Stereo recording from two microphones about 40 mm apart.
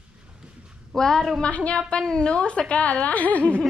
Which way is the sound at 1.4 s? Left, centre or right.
Left.